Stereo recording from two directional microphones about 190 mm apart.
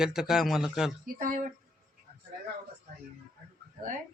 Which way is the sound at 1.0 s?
45° right (ahead or behind).